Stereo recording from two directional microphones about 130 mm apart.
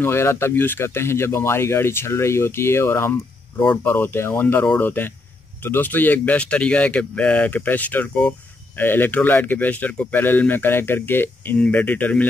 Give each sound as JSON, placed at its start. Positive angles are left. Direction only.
{"t": 0.0, "sound": "speech", "side_deg": 20}